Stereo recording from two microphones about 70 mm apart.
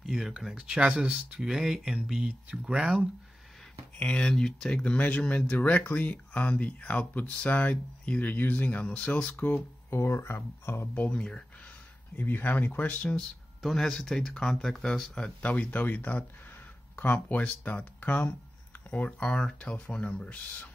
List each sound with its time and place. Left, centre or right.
0.0 s speech: centre
4.0 s speech: centre
9.8 s speech: left
11.0 s speech: centre
12.2 s speech: left
13.6 s speech: centre